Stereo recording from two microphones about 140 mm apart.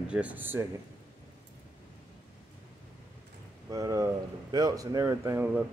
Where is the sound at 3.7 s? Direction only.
25° right (ahead or behind).